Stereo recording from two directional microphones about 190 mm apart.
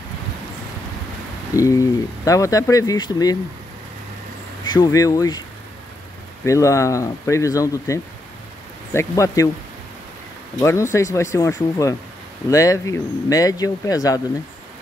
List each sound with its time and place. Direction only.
1.6 s speech: 15° left (ahead or behind)
4.6 s speech: 20° left (ahead or behind)
6.4 s speech: 15° left (ahead or behind)
10.6 s speech: 15° left (ahead or behind)